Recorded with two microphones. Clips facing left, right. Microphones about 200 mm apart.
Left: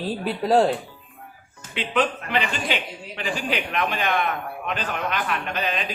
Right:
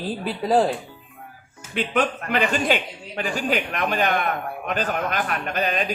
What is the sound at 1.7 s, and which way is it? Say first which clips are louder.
A man's voice: right 1 dB; 45° right (ahead or behind).